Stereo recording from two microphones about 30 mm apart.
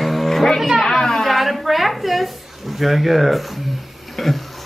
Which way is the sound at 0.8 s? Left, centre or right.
Centre.